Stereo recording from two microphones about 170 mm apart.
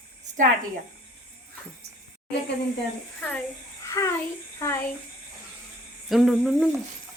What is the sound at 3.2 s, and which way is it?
A child's voice, 10° left (ahead or behind).